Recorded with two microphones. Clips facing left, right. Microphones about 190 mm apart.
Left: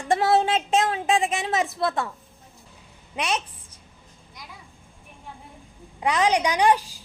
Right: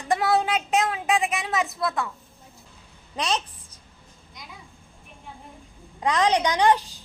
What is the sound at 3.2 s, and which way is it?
Speech, 10° left (ahead or behind).